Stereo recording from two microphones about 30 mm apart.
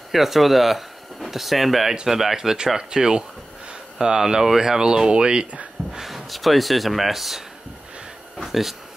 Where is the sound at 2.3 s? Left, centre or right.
Centre.